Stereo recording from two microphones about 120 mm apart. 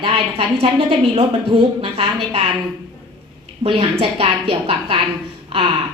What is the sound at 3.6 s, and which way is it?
A woman's voice, 50° right (ahead or behind).